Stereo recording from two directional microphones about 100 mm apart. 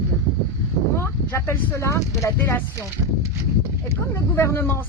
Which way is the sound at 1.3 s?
25° left (ahead or behind).